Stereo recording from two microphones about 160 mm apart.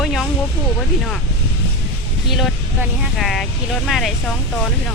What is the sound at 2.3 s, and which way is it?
Speech, centre (ahead or behind).